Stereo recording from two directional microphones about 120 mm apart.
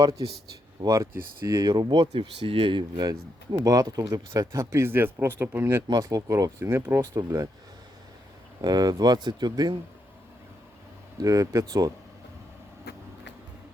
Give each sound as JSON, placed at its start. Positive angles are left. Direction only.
{"t": 0.8, "sound": "speech", "side_deg": -30}
{"t": 8.6, "sound": "speech", "side_deg": -35}
{"t": 11.2, "sound": "speech", "side_deg": -30}